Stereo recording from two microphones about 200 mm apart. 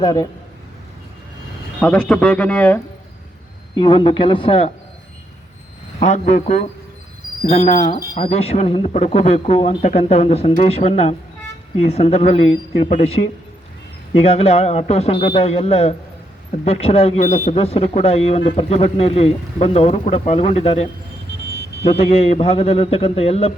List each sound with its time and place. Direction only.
0.0 s speech: 20° left (ahead or behind)
1.8 s speech: 5° left (ahead or behind)
3.8 s speech: 25° left (ahead or behind)
6.0 s speech: 35° left (ahead or behind)
21.8 s speech: 30° left (ahead or behind)